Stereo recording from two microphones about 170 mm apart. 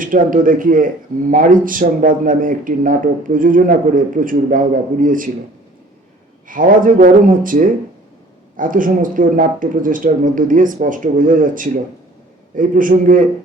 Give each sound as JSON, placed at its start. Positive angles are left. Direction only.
{"t": 0.0, "sound": "speech", "side_deg": -55}
{"t": 6.5, "sound": "speech", "side_deg": -55}